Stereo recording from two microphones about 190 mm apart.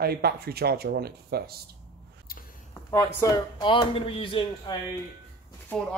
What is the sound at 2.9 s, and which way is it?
Speech, 15° left (ahead or behind).